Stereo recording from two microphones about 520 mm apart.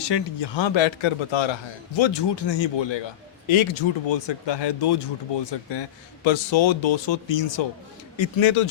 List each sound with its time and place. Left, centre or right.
0.0 s a man's voice: left
6.2 s a man's voice: left